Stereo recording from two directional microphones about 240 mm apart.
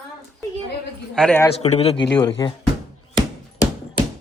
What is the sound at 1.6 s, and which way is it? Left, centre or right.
Speech, left.